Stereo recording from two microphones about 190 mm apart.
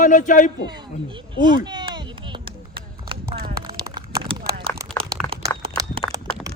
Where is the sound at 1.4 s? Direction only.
25° right (ahead or behind).